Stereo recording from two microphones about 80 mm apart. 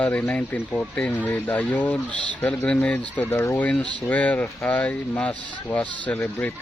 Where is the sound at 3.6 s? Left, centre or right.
Centre.